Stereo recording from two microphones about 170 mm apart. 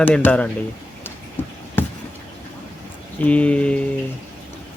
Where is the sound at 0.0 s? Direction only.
10° left (ahead or behind).